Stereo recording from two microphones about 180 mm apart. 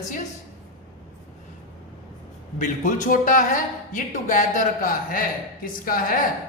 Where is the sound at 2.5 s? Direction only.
45° left (ahead or behind).